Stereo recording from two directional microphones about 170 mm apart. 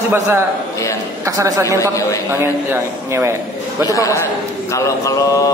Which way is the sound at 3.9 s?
20° left (ahead or behind).